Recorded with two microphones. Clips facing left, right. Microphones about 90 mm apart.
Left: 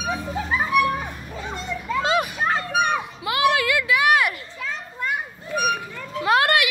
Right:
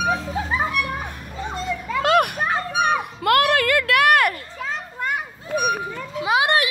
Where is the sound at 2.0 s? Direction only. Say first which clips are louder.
Right 5 dB; 55° right (ahead or behind).